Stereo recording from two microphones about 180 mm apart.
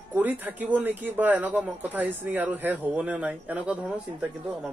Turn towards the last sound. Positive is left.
turn(degrees=-5)  # may be behind; listen again after turning